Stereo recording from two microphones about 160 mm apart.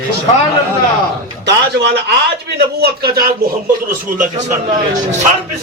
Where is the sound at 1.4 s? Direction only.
90° right.